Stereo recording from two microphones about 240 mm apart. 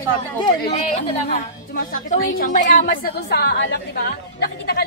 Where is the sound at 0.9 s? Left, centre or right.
Left.